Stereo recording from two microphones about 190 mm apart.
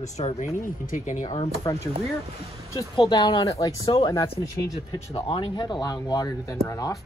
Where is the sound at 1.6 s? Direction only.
20° left (ahead or behind).